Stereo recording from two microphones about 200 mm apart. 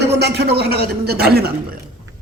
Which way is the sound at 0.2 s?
55° right (ahead or behind).